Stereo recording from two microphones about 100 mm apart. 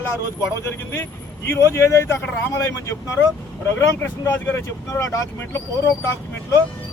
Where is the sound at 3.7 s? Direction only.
20° left (ahead or behind).